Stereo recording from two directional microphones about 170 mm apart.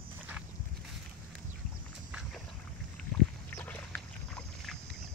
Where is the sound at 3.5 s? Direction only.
10° left (ahead or behind).